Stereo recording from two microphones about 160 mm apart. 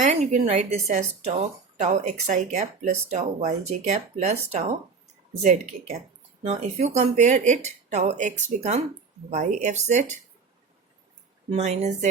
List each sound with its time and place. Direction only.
0.0 s speech: 45° right (ahead or behind)
11.5 s speech: 45° right (ahead or behind)